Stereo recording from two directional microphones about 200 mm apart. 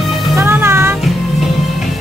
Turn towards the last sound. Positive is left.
turn(degrees=-10)  # may be behind; listen again after turning